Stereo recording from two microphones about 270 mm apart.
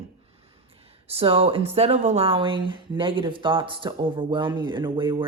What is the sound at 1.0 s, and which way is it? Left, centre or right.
Speech, right.